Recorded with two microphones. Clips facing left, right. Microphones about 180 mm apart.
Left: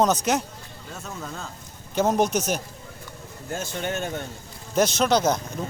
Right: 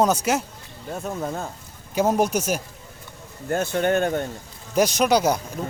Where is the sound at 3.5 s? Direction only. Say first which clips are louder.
Right 8 dB; 60° right (ahead or behind).